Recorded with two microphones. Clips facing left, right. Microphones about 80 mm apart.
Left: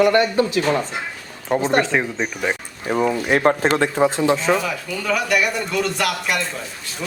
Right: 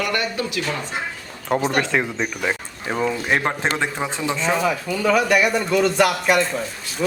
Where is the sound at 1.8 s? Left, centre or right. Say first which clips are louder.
Left 1 dB; centre.